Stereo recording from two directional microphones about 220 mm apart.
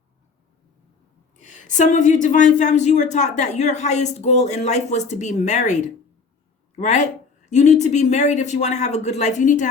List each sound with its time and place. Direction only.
1.4 s a woman's voice: 35° left (ahead or behind)
6.7 s a woman's voice: 35° left (ahead or behind)